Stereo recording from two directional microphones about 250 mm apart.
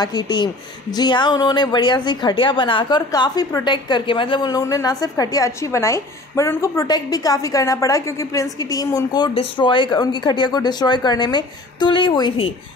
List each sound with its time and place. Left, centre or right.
0.0 s a woman's voice: centre